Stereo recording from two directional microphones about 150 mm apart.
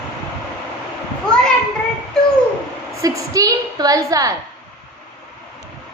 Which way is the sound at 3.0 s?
25° right (ahead or behind).